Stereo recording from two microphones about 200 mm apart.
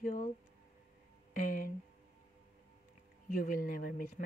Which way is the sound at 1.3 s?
45° left (ahead or behind).